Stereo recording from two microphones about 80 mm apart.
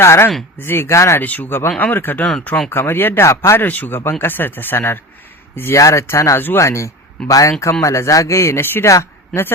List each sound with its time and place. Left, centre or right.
0.0 s speech: left
1.2 s speech: left
3.6 s speech: left
5.7 s speech: left